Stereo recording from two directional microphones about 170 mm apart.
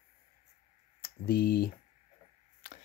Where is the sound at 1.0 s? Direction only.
65° left (ahead or behind).